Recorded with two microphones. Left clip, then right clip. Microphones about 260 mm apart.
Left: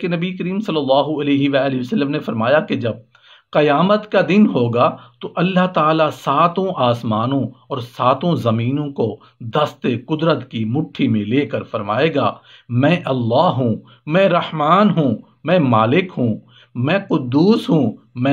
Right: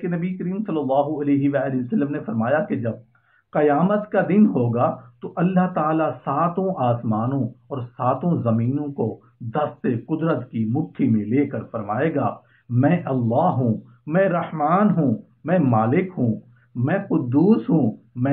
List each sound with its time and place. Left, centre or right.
0.0 s speech: left